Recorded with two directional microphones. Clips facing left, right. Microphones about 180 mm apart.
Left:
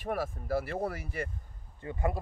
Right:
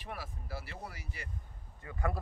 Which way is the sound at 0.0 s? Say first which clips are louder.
Left 11 dB; 50° left (ahead or behind).